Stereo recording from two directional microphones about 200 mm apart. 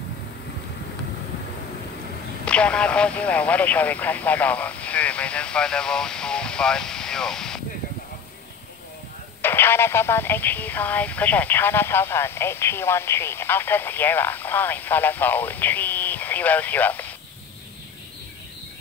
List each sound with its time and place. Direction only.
2.4 s speech: 5° left (ahead or behind)
9.4 s speech: 10° left (ahead or behind)